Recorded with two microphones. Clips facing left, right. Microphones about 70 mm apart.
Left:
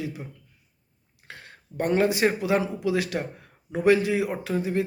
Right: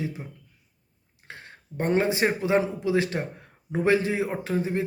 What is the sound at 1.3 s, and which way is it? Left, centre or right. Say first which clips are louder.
A man's voice: right 1 dB; right.